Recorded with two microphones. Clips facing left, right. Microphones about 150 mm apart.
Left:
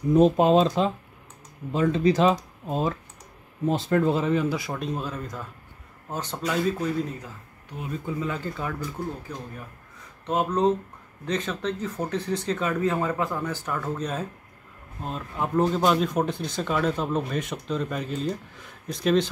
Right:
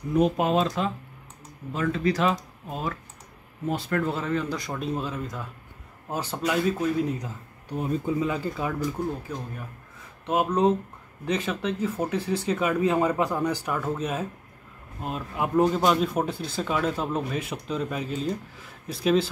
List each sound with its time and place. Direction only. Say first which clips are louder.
0.1 s speech: left 5 dB; 25° left (ahead or behind); by 19.2 s 5° right (ahead or behind)